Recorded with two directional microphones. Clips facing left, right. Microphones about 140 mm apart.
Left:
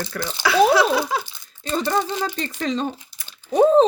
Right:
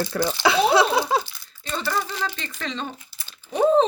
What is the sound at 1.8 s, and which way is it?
Speech, 25° left (ahead or behind).